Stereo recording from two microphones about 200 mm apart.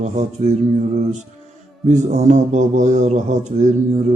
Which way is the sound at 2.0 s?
35° right (ahead or behind).